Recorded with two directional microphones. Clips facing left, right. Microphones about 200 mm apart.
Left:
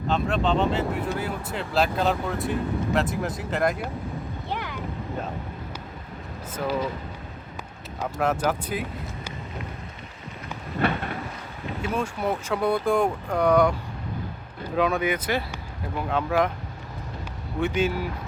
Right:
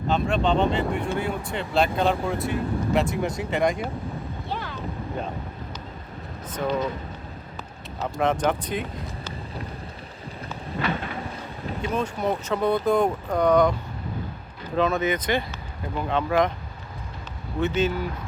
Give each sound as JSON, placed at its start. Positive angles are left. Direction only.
{"t": 0.1, "sound": "speech", "side_deg": 0}
{"t": 4.4, "sound": "a sound", "side_deg": 15}
{"t": 8.0, "sound": "speech", "side_deg": 5}
{"t": 10.8, "sound": "a sound", "side_deg": 50}
{"t": 11.8, "sound": "speech", "side_deg": 5}
{"t": 14.8, "sound": "speech", "side_deg": 10}
{"t": 17.6, "sound": "speech", "side_deg": 10}